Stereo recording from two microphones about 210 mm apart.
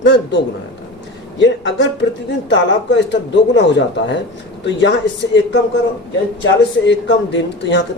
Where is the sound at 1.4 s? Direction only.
60° left (ahead or behind).